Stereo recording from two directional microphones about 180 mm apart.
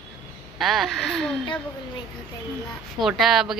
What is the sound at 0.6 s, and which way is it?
Speech, centre (ahead or behind).